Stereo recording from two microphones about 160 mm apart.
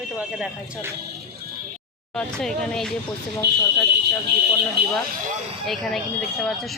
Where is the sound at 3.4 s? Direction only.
90° right.